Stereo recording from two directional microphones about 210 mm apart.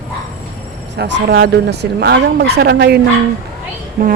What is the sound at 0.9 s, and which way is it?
Speech, 55° right (ahead or behind).